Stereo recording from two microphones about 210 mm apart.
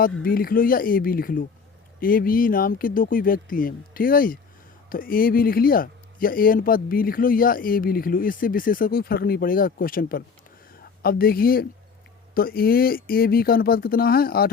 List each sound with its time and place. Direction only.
0.0 s speech: 45° left (ahead or behind)